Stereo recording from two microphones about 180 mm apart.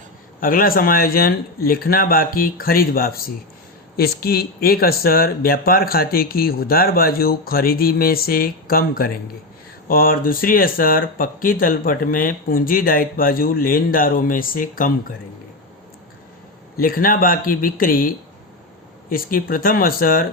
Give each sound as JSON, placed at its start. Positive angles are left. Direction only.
{"t": 0.3, "sound": "speech", "side_deg": 50}
{"t": 16.8, "sound": "speech", "side_deg": 50}